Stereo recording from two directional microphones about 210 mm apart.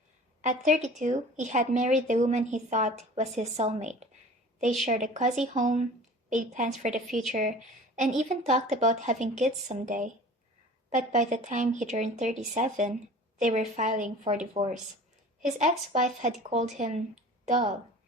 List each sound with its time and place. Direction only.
0.4 s speech: 35° right (ahead or behind)